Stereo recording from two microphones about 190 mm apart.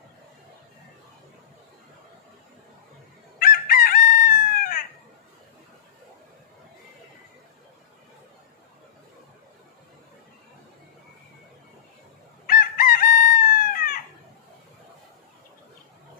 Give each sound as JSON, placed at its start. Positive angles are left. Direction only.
{"t": 3.3, "sound": "chicken", "side_deg": 50}
{"t": 12.4, "sound": "chicken", "side_deg": 50}